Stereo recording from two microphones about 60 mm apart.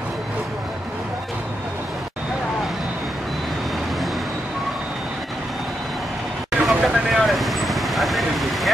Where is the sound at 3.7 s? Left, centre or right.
Centre.